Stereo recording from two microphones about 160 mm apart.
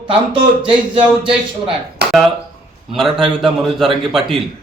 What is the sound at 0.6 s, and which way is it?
Speech, 30° right (ahead or behind).